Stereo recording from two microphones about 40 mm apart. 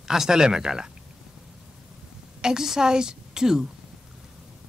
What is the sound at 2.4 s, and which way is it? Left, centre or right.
A woman's voice, centre.